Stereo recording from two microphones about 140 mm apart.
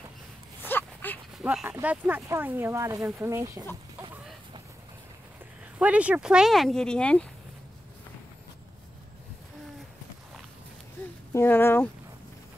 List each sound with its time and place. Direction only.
0.7 s dog: 15° left (ahead or behind)
1.4 s speech: 10° right (ahead or behind)
5.8 s speech: 10° right (ahead or behind); by 7.2 s 10° left (ahead or behind)
11.3 s speech: 15° left (ahead or behind)